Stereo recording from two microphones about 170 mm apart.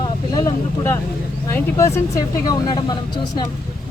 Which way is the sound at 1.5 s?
15° left (ahead or behind).